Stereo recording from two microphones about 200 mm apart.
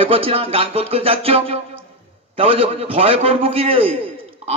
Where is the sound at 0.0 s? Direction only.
30° right (ahead or behind).